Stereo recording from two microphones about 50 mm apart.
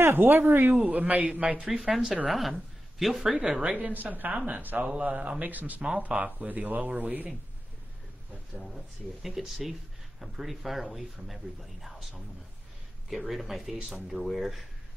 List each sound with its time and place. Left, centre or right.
0.0 s speech: right
1.6 s speech: centre
3.3 s speech: centre
3.7 s speech: right
8.5 s speech: centre
9.2 s speech: centre
13.1 s speech: centre